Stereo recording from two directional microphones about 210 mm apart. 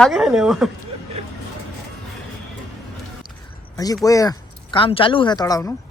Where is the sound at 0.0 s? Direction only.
Centre (ahead or behind).